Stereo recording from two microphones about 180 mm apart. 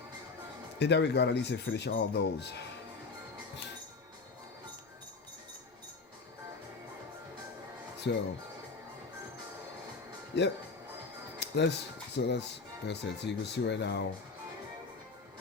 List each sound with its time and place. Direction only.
0.8 s speech: 70° left (ahead or behind)
8.1 s speech: 80° left
10.3 s speech: 65° left (ahead or behind)